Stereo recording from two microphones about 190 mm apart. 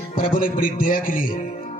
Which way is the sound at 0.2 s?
45° left (ahead or behind).